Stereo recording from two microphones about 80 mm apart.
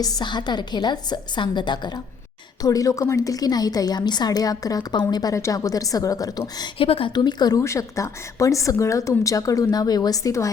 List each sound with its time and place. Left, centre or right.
0.0 s a woman's voice: left
2.6 s a woman's voice: left
6.6 s speech: left
7.6 s a woman's voice: left